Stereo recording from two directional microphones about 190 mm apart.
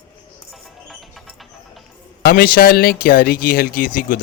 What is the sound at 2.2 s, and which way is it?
Speech, 50° left (ahead or behind).